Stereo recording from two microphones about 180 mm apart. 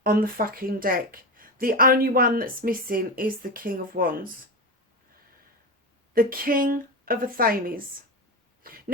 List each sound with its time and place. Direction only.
0.0 s a woman's voice: 55° right (ahead or behind)
6.1 s a woman's voice: 50° right (ahead or behind)